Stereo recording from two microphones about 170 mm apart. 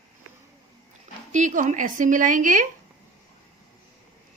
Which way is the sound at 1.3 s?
45° right (ahead or behind).